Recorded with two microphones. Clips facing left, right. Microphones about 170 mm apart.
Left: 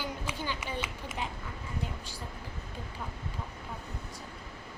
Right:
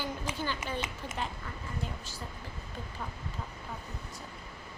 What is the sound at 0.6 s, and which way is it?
Speech, 45° right (ahead or behind).